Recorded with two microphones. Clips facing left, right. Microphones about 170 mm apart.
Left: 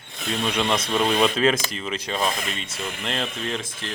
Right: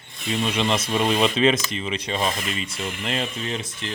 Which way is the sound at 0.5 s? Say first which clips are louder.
Left 1 dB; 5° right (ahead or behind).